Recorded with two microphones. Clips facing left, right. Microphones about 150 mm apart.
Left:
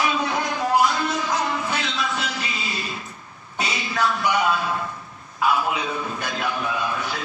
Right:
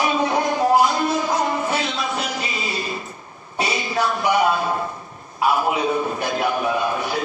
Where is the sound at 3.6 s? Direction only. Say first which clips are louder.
Right 3 dB; 45° right (ahead or behind).